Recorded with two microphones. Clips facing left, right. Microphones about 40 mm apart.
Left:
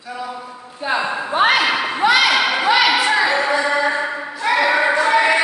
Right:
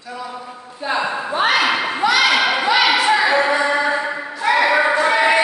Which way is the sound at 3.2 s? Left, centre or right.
Centre.